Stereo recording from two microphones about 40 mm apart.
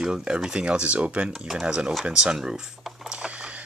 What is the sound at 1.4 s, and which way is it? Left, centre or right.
Speech, centre.